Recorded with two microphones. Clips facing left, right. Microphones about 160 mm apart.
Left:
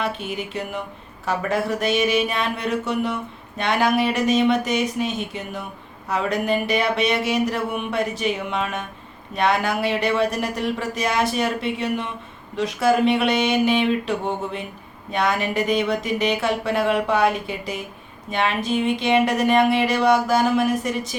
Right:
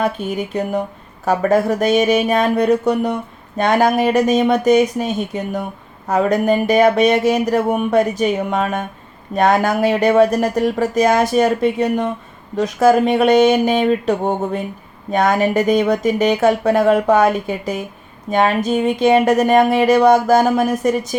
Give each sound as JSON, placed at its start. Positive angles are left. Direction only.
{"t": 0.0, "sound": "speech", "side_deg": -40}